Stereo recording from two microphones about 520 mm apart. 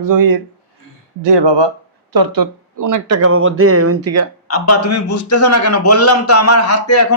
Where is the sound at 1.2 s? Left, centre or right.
Right.